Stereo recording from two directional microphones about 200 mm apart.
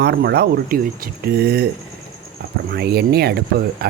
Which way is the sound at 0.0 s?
55° right (ahead or behind).